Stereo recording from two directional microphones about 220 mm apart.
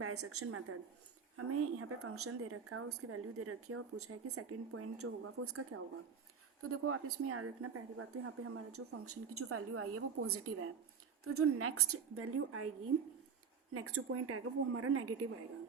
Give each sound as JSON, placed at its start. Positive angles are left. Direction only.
{"t": 0.0, "sound": "a woman's voice", "side_deg": -85}
{"t": 13.7, "sound": "a woman's voice", "side_deg": -85}